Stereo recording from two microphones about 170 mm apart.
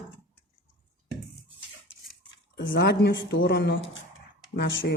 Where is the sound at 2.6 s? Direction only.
75° left (ahead or behind).